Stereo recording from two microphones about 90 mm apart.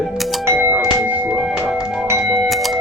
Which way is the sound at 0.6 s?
15° right (ahead or behind).